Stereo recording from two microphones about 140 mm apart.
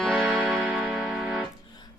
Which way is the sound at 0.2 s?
Centre (ahead or behind).